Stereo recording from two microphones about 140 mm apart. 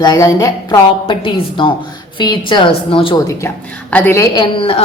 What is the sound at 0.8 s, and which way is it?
A woman's voice, 35° left (ahead or behind).